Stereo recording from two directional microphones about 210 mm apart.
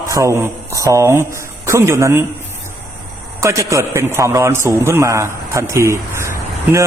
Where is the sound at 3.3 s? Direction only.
15° right (ahead or behind).